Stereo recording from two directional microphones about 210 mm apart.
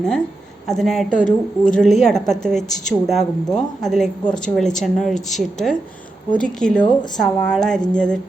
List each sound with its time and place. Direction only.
0.7 s a woman's voice: centre (ahead or behind)
1.1 s a woman's voice: 40° left (ahead or behind)
1.7 s a woman's voice: centre (ahead or behind)